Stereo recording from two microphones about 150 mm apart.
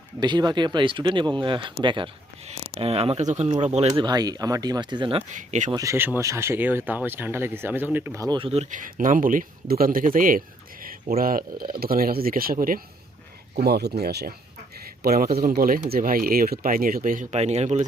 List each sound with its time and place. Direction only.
0.2 s speech: 30° right (ahead or behind); by 4.0 s 45° right (ahead or behind)
4.0 s speech: 25° right (ahead or behind)
5.3 s speech: 55° right (ahead or behind)
5.7 s speech: 20° right (ahead or behind)
8.4 s speech: 40° right (ahead or behind)
8.7 s speech: 65° right (ahead or behind)
13.7 s speech: 90° right; by 17.8 s 50° right (ahead or behind)